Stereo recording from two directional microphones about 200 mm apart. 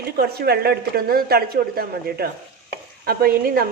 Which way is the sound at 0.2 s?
50° right (ahead or behind).